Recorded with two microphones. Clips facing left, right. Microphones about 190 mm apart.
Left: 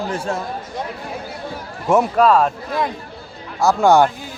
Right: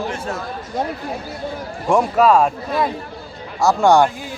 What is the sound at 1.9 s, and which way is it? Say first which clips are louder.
A man's voice: even; centre (ahead or behind).